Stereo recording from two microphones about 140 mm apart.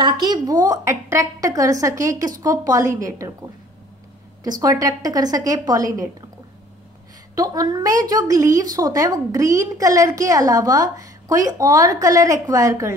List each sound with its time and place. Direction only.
0.0 s a woman's voice: 30° right (ahead or behind)
4.4 s a woman's voice: 25° right (ahead or behind)
7.3 s a woman's voice: 25° right (ahead or behind)